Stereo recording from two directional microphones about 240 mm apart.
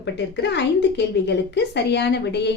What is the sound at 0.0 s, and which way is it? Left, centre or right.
A woman's voice, left.